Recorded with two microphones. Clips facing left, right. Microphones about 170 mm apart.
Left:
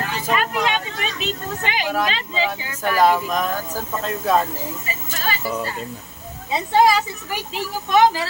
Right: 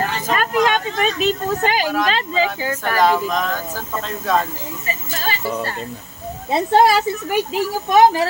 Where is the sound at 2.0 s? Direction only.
45° right (ahead or behind).